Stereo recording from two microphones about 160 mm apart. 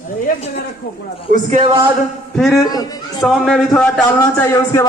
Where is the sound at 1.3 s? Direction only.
55° right (ahead or behind).